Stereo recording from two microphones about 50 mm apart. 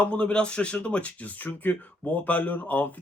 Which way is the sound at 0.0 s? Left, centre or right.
Left.